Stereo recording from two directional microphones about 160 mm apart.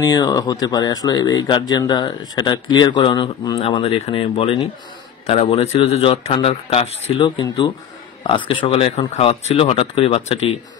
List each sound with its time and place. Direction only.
0.0 s speech: 25° left (ahead or behind)
3.8 s speech: 40° left (ahead or behind)